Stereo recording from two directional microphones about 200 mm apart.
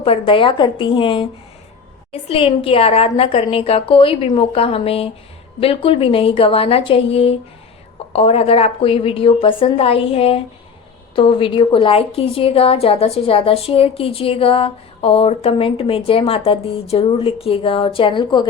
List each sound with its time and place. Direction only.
0.0 s a woman's voice: 25° left (ahead or behind)